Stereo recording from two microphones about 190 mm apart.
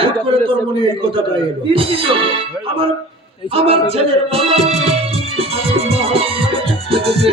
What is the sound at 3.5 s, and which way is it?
Music, 30° right (ahead or behind).